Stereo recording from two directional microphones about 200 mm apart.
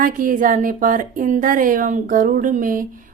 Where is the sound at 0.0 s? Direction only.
40° right (ahead or behind).